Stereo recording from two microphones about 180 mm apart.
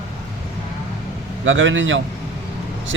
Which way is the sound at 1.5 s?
90° right.